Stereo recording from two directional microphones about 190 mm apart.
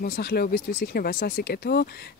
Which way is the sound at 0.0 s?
55° left (ahead or behind).